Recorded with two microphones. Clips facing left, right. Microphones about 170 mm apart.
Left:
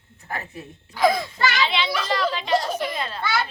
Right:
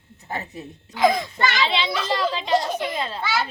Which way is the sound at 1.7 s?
25° right (ahead or behind).